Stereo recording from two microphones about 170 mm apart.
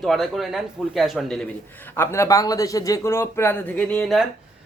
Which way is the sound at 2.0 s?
15° left (ahead or behind).